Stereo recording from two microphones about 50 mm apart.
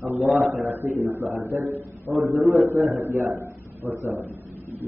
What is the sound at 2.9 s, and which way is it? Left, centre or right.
A man's voice, right.